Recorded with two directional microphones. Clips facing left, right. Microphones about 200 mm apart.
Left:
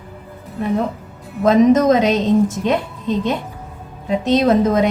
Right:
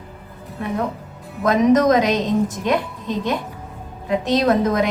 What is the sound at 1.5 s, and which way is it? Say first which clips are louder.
Speech: left 3 dB; 25° left (ahead or behind).